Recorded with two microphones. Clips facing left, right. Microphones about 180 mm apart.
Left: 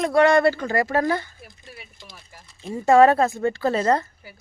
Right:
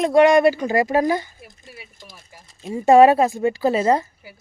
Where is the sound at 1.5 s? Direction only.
5° right (ahead or behind).